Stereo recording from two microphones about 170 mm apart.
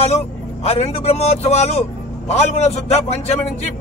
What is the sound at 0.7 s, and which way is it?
A man's voice, 35° left (ahead or behind).